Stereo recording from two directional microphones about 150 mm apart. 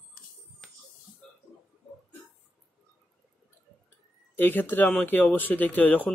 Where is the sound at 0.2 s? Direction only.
75° left (ahead or behind).